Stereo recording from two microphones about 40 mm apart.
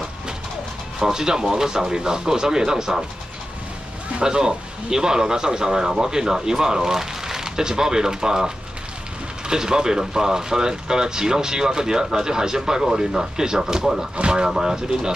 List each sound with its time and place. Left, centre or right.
0.9 s speech: centre
4.2 s speech: centre
9.5 s speech: centre
14.1 s speech: right